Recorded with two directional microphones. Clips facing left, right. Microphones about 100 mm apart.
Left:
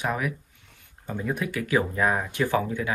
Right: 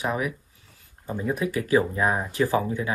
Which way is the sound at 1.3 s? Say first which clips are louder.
Right 4 dB; 30° right (ahead or behind).